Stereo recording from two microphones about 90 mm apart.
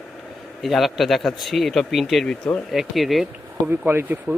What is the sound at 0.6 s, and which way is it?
Speech, centre (ahead or behind).